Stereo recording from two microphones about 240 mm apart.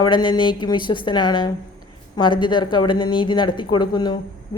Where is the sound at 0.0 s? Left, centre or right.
Centre.